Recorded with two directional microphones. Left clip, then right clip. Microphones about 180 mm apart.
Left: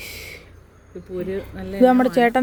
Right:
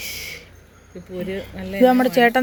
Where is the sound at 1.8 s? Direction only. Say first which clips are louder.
Right 1 dB; 20° left (ahead or behind).